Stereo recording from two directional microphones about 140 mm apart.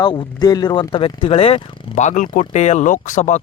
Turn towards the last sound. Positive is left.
turn(degrees=60)  # may be behind; listen again after turning